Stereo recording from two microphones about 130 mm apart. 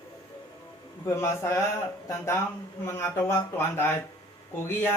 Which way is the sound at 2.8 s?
20° left (ahead or behind).